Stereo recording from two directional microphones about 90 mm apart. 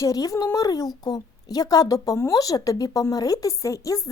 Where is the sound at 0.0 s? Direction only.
40° left (ahead or behind).